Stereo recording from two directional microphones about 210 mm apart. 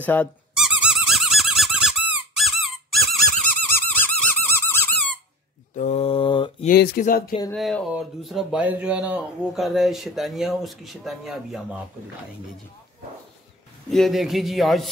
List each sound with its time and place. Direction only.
0.0 s squeak: 10° left (ahead or behind)
0.7 s squeak: 5° right (ahead or behind)
5.8 s mantra: 30° left (ahead or behind)
6.7 s speech: 45° left (ahead or behind)
7.5 s speech: centre (ahead or behind)
13.8 s speech: centre (ahead or behind)